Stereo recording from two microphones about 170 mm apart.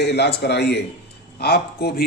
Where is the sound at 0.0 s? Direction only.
75° left (ahead or behind).